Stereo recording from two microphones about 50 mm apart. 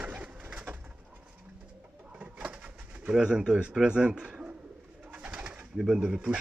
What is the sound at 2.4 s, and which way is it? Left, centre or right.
Pigeon, right.